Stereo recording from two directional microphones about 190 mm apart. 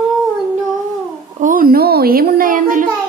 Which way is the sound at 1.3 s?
45° right (ahead or behind).